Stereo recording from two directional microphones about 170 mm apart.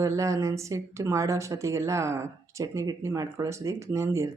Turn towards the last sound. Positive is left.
turn(degrees=-15)  # may be behind; listen again after turning